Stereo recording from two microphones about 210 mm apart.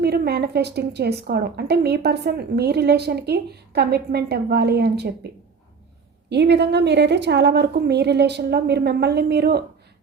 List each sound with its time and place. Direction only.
0.0 s a woman's voice: 50° right (ahead or behind)
6.3 s a woman's voice: 55° right (ahead or behind)